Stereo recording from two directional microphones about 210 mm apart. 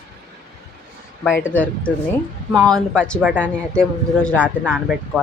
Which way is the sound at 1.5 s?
5° left (ahead or behind).